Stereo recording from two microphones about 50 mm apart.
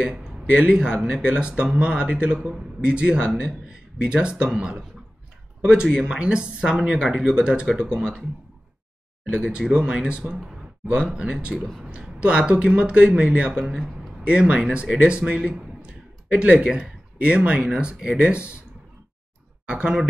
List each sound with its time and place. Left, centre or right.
0.0 s speech: right
1.5 s speech: centre
9.3 s speech: centre
13.7 s a man's voice: centre
14.2 s speech: centre
19.7 s speech: centre